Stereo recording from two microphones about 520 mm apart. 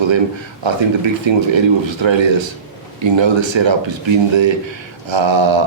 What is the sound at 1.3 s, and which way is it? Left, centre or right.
Speech, right.